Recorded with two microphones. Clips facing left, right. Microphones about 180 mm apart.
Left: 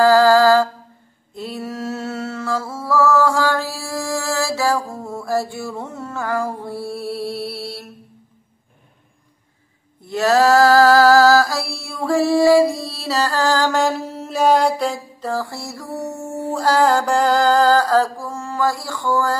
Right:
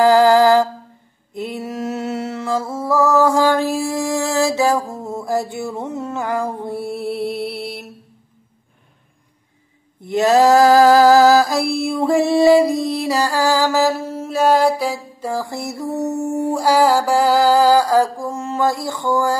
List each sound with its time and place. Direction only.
0.0 s music: 20° right (ahead or behind)
10.0 s female singing: 20° right (ahead or behind)